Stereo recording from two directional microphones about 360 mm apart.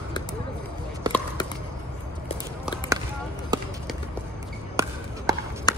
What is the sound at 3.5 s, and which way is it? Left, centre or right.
Run, centre.